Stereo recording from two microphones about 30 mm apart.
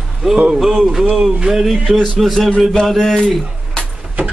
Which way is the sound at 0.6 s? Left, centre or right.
Centre.